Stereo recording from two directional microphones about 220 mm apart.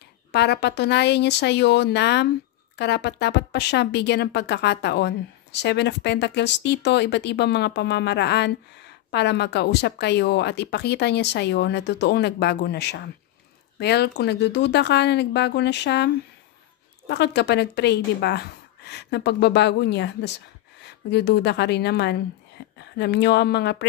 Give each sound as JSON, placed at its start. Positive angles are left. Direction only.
{"t": 0.3, "sound": "a woman's voice", "side_deg": 50}
{"t": 17.1, "sound": "a woman's voice", "side_deg": 50}